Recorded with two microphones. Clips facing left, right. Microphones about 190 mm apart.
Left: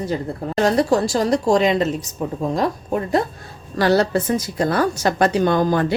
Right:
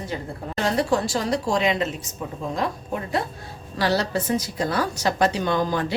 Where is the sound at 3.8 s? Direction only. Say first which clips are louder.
Left 6 dB; 50° left (ahead or behind).